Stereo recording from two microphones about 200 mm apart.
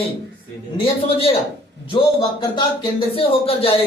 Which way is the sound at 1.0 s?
30° left (ahead or behind).